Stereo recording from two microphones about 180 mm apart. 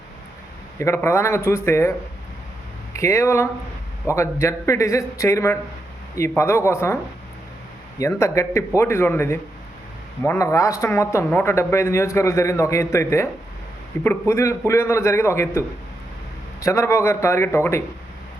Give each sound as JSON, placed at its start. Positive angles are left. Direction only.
{"t": 0.8, "sound": "speech", "side_deg": 15}
{"t": 2.9, "sound": "speech", "side_deg": 15}